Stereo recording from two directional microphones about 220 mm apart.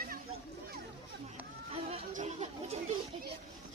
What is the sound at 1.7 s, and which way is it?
Chatter, 25° right (ahead or behind).